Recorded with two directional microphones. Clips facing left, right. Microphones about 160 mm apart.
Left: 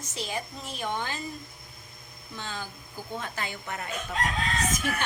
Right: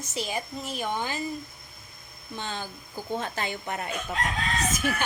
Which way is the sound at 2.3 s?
25° right (ahead or behind).